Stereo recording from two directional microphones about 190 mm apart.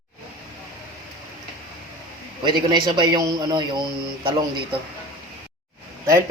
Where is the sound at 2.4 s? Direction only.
25° right (ahead or behind).